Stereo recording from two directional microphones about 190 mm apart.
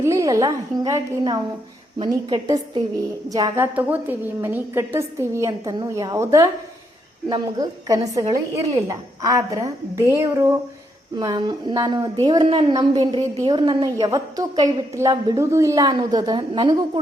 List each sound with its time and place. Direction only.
0.0 s a woman's voice: 15° right (ahead or behind)